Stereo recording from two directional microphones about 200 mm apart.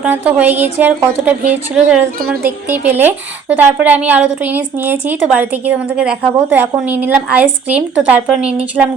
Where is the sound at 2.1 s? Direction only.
45° right (ahead or behind).